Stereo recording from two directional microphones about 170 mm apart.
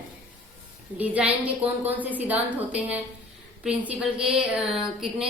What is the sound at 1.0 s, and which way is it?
A woman's voice, 10° right (ahead or behind).